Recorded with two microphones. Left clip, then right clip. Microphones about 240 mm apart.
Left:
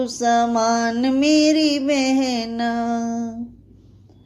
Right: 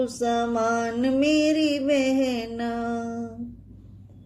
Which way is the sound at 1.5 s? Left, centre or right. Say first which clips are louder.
Left 5 dB; left.